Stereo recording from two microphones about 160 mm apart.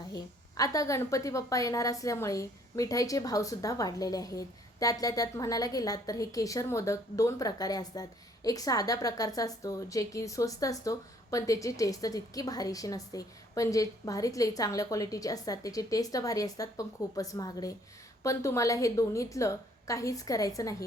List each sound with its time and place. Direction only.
0.1 s a woman's voice: 20° left (ahead or behind)